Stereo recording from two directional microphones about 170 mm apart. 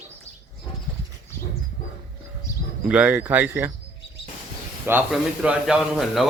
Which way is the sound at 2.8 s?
5° right (ahead or behind).